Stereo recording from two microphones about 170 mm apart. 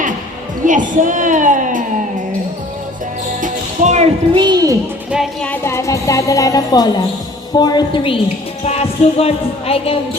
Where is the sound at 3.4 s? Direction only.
45° right (ahead or behind).